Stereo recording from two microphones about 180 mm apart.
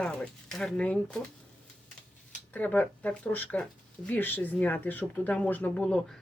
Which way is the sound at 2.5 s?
10° left (ahead or behind).